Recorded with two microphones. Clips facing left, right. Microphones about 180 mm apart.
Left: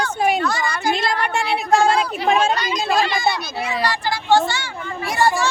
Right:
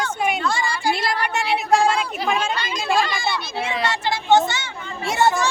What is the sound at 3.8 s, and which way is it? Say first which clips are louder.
A child's voice: left 1 dB; 25° right (ahead or behind).